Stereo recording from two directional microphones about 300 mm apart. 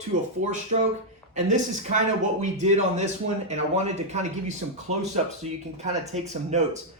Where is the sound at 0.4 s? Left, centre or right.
Right.